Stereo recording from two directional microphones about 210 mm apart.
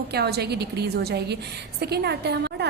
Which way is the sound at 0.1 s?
50° right (ahead or behind).